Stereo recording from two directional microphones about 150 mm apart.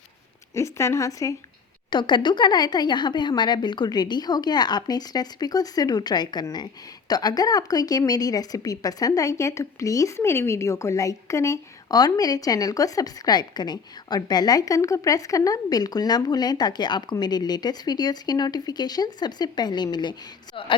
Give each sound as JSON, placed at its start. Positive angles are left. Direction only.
{"t": 0.5, "sound": "a woman's voice", "side_deg": 20}